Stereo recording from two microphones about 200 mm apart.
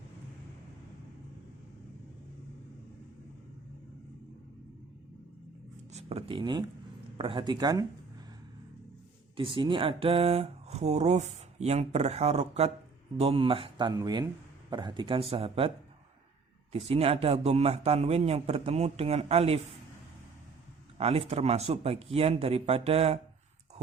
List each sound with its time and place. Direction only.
5.9 s speech: 30° right (ahead or behind)
9.3 s speech: 25° right (ahead or behind)
16.7 s speech: 30° right (ahead or behind)
21.0 s speech: 30° right (ahead or behind)